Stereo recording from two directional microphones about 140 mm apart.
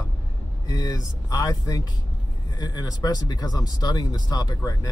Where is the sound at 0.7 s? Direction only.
30° left (ahead or behind).